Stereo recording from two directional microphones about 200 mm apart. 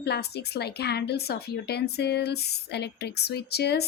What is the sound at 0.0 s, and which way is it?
A woman's voice, 55° left (ahead or behind).